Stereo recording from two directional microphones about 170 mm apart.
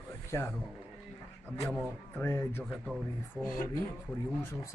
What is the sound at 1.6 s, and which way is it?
Speech, 10° left (ahead or behind).